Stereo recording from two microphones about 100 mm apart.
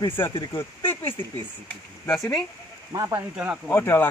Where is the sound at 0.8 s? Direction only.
55° left (ahead or behind).